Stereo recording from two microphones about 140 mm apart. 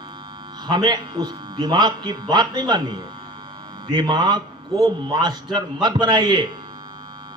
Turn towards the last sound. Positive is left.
turn(degrees=-30)  # may be behind; listen again after turning